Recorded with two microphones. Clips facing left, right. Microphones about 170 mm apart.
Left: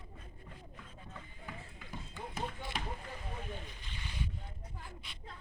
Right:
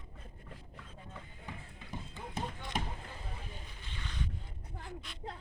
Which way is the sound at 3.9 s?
15° left (ahead or behind).